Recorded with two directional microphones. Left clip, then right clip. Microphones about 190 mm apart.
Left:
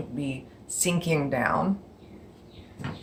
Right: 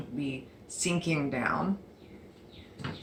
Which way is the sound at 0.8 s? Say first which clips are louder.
Left 4 dB; 50° left (ahead or behind).